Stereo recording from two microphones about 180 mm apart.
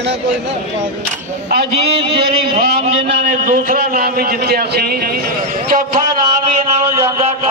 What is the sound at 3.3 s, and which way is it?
A man's voice, 50° right (ahead or behind).